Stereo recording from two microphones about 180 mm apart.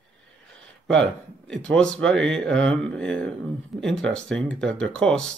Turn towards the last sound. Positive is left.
turn(degrees=5)  # may be behind; listen again after turning